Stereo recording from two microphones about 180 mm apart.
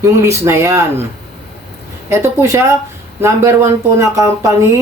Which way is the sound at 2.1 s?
15° right (ahead or behind).